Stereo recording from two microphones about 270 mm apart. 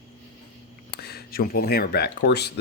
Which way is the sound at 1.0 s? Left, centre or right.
Left.